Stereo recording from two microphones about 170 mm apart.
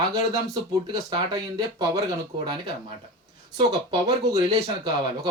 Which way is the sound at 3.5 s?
25° right (ahead or behind).